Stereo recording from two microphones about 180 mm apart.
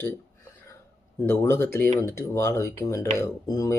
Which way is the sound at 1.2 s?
15° left (ahead or behind).